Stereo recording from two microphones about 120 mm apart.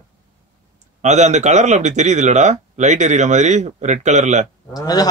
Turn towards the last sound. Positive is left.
turn(degrees=30)  # may be behind; listen again after turning